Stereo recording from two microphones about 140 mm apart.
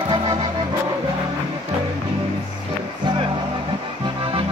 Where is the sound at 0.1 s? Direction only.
30° right (ahead or behind).